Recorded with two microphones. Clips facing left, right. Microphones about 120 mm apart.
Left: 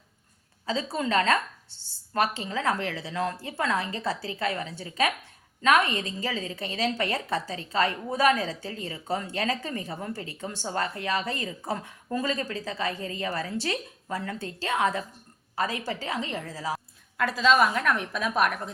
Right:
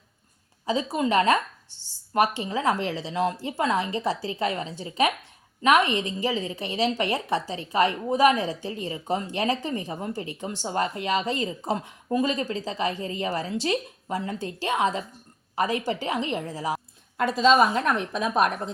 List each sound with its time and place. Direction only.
0.6 s a woman's voice: 15° right (ahead or behind)